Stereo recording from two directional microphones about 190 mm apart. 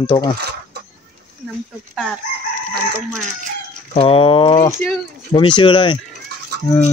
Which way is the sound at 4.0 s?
30° left (ahead or behind).